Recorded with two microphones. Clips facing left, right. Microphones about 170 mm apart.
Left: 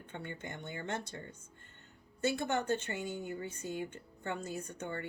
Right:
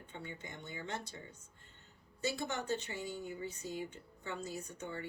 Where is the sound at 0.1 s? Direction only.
60° left (ahead or behind).